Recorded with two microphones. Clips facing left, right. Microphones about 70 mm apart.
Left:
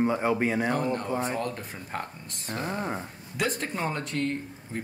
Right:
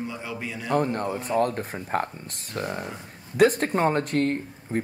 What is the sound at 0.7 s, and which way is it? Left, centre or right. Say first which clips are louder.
Speech: right 3 dB; right.